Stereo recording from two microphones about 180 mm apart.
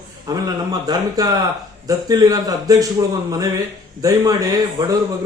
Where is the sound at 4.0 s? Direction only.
20° right (ahead or behind).